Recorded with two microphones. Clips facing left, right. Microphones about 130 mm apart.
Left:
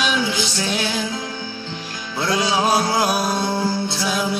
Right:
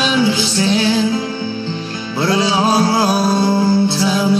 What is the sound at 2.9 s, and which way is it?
Music, 30° right (ahead or behind).